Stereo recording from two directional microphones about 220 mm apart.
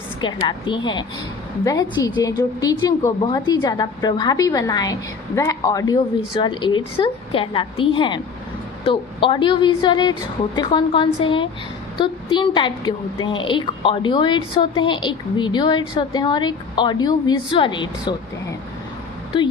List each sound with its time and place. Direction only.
0.2 s a woman's voice: 20° left (ahead or behind)